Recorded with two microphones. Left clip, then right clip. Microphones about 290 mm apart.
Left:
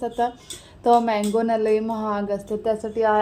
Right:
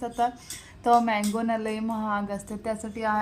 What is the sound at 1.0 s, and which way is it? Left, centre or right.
A woman's voice, right.